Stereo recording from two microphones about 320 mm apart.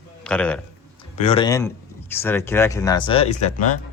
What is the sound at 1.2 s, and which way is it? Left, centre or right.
A man's voice, centre.